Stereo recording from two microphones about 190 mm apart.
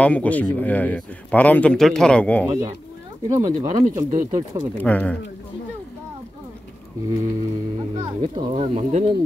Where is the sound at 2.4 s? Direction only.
20° right (ahead or behind).